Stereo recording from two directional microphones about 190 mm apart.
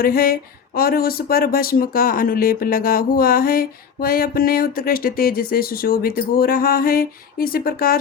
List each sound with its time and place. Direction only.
0.0 s speech: 50° left (ahead or behind)